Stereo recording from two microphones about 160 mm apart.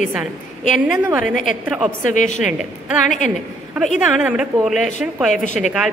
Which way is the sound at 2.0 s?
50° left (ahead or behind).